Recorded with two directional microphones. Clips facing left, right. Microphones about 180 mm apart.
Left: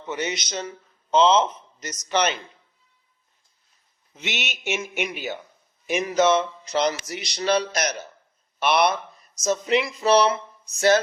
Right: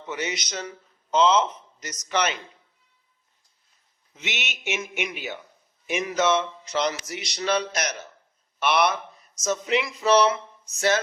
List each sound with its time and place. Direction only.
0.1 s speech: 30° left (ahead or behind)
4.1 s speech: 35° left (ahead or behind)